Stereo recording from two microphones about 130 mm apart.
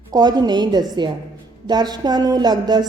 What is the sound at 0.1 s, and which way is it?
A woman's voice, 35° right (ahead or behind).